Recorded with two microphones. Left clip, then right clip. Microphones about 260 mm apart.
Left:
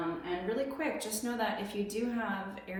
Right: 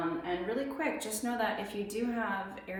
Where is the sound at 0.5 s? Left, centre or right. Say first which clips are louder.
Left 2 dB; centre.